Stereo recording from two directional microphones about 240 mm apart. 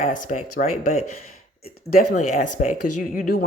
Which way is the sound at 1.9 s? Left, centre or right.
Left.